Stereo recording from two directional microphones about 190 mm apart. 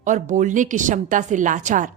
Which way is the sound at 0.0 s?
40° right (ahead or behind).